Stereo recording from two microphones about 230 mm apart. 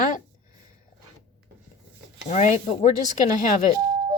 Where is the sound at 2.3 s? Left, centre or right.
Left.